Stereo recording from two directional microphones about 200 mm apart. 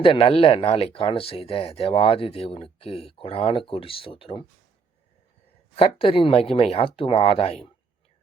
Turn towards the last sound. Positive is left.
turn(degrees=30)  # may be behind; listen again after turning